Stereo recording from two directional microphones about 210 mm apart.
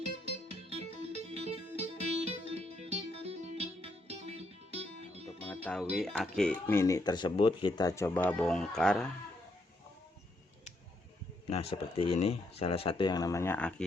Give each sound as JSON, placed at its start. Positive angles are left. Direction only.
{"t": 0.7, "sound": "music", "side_deg": -30}
{"t": 5.5, "sound": "music", "side_deg": 5}
{"t": 5.8, "sound": "speech", "side_deg": -5}
{"t": 6.1, "sound": "speech", "side_deg": 5}
{"t": 11.4, "sound": "speech", "side_deg": 30}